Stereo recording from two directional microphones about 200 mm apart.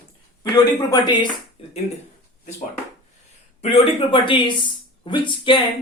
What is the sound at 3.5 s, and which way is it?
Speech, 30° left (ahead or behind).